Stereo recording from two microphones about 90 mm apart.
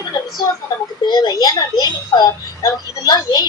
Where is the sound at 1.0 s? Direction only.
55° left (ahead or behind).